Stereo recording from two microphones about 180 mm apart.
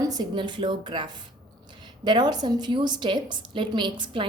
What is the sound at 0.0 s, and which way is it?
A woman's voice, 20° right (ahead or behind).